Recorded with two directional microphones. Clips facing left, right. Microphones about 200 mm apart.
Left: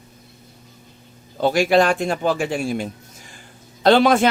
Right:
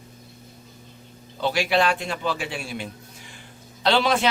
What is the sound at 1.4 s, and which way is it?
A man's voice, 45° left (ahead or behind).